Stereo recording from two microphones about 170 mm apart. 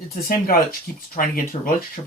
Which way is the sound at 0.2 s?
60° left (ahead or behind).